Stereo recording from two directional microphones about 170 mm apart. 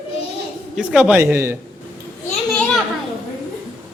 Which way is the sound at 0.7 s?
5° right (ahead or behind).